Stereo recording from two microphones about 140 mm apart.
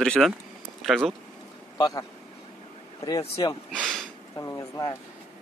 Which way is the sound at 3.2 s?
40° left (ahead or behind).